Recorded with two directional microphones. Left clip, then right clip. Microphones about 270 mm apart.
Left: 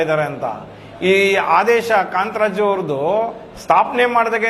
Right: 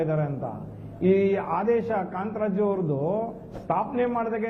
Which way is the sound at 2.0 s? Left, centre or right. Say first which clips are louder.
Left 12 dB; centre.